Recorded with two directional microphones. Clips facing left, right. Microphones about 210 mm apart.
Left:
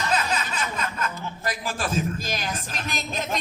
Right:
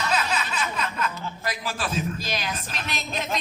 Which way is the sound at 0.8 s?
45° left (ahead or behind).